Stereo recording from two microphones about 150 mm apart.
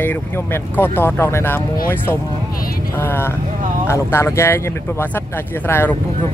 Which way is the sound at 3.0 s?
15° left (ahead or behind).